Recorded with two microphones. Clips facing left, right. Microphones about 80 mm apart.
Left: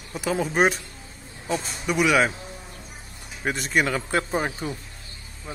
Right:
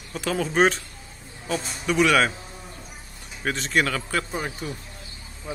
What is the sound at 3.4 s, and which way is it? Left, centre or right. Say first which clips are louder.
Speech: even; centre.